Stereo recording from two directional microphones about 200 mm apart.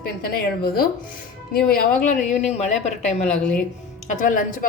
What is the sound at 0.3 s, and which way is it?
Speech, 45° left (ahead or behind).